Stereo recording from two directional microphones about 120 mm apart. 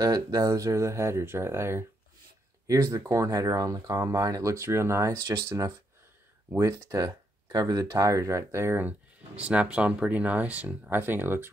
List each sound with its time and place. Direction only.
0.0 s speech: 30° right (ahead or behind)